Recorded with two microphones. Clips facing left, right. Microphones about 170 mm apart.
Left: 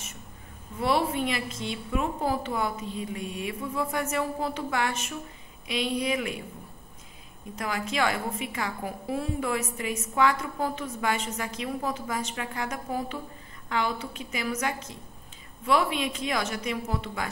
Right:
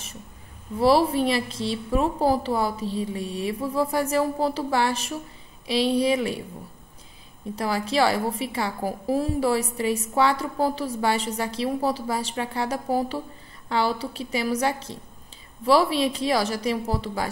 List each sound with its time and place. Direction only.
0.7 s a woman's voice: 35° right (ahead or behind)
7.5 s a woman's voice: 30° right (ahead or behind)